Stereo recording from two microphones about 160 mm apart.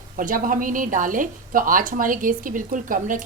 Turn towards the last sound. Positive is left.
turn(degrees=-55)  # may be behind; listen again after turning